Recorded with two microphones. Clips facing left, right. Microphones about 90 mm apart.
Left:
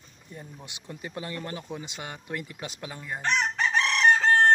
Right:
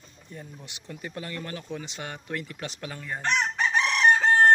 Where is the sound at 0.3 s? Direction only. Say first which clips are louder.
Even; 15° left (ahead or behind).